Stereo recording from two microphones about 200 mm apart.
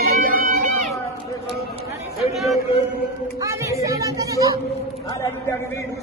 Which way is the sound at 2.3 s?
Centre (ahead or behind).